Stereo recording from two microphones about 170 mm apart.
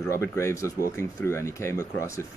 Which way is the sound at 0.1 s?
15° left (ahead or behind).